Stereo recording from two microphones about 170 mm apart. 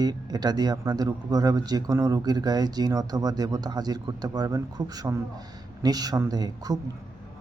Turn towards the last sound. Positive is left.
turn(degrees=-25)  # may be behind; listen again after turning